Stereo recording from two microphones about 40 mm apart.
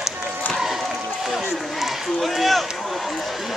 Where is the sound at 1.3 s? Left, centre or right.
Centre.